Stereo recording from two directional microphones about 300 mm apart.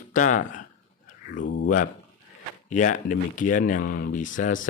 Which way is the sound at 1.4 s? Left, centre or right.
Left.